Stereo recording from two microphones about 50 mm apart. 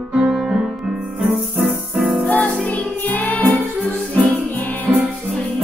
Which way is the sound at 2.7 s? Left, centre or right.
Left.